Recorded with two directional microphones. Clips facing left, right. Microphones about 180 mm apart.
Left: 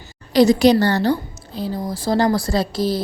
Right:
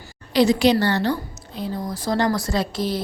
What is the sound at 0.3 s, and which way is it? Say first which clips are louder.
A woman's voice: left 4 dB; 40° left (ahead or behind).